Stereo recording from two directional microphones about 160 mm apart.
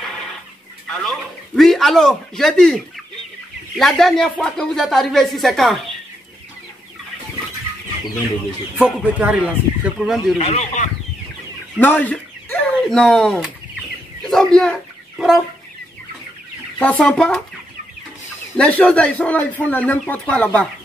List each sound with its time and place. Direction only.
0.0 s chicken: centre (ahead or behind)
1.0 s speech: centre (ahead or behind)
8.7 s speech: 10° right (ahead or behind)
10.4 s speech: 45° left (ahead or behind)
11.8 s speech: 10° left (ahead or behind)
14.2 s chicken: 5° left (ahead or behind)
16.7 s a man's voice: 10° left (ahead or behind)
18.6 s a man's voice: 5° left (ahead or behind)